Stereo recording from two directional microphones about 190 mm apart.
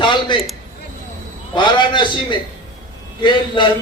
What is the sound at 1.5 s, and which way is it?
A man's voice, 25° left (ahead or behind).